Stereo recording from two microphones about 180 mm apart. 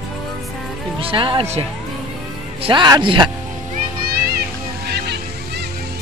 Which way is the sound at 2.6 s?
25° right (ahead or behind).